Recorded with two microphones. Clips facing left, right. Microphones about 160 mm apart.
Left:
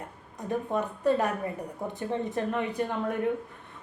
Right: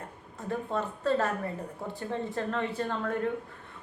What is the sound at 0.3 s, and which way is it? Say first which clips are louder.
A woman's voice: left 3 dB; 15° left (ahead or behind).